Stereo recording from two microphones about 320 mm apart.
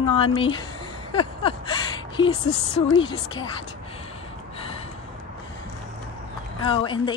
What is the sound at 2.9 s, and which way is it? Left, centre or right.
Speech, centre.